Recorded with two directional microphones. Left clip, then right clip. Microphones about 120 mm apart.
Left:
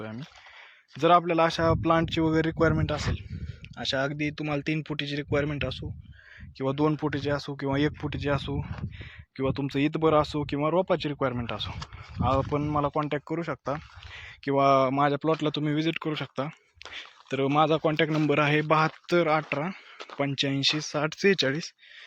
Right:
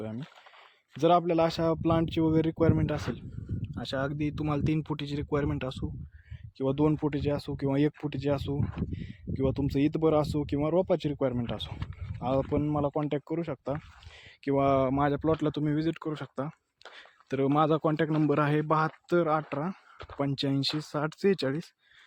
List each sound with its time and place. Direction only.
0.9 s speech: 40° right (ahead or behind)
3.6 s speech: 20° right (ahead or behind)
15.6 s speech: 15° right (ahead or behind)
17.2 s speech: 30° right (ahead or behind); by 19.7 s 15° right (ahead or behind)
20.1 s speech: 30° right (ahead or behind)
21.0 s speech: 15° right (ahead or behind)